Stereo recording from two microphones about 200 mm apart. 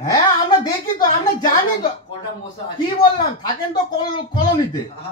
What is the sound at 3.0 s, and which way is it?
Speech, 25° left (ahead or behind).